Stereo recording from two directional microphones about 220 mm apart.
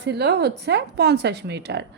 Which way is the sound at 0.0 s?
50° right (ahead or behind).